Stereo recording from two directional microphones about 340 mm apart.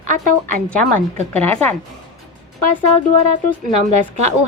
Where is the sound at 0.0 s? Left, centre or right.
Right.